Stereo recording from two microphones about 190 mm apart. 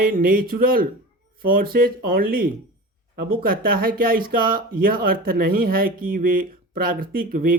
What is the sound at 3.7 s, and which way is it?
Speech, 50° right (ahead or behind).